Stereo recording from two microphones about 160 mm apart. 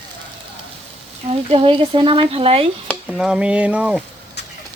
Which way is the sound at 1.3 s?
35° right (ahead or behind).